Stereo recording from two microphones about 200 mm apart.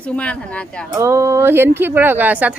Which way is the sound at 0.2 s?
5° left (ahead or behind).